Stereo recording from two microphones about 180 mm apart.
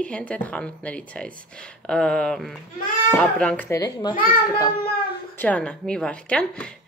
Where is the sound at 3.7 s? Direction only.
20° left (ahead or behind).